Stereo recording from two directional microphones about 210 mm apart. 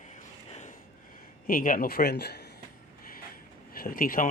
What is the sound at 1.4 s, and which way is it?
Speech, 40° left (ahead or behind).